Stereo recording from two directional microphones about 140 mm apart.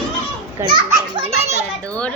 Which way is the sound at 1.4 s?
55° right (ahead or behind).